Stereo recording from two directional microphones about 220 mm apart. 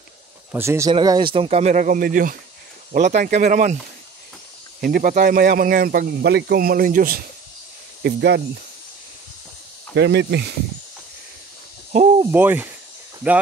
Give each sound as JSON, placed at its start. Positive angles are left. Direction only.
{"t": 0.5, "sound": "speech", "side_deg": -10}
{"t": 4.7, "sound": "speech", "side_deg": -40}
{"t": 9.9, "sound": "speech", "side_deg": -50}
{"t": 11.9, "sound": "owl", "side_deg": -30}
{"t": 12.2, "sound": "speech", "side_deg": -10}